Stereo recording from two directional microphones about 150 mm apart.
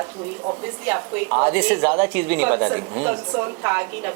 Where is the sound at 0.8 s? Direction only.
15° right (ahead or behind).